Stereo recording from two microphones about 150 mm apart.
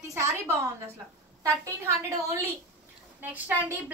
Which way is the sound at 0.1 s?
20° right (ahead or behind).